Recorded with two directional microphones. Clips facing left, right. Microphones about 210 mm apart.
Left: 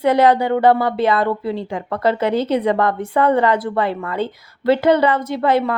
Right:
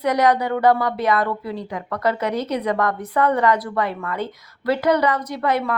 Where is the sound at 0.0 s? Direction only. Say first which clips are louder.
Left 4 dB; 30° left (ahead or behind).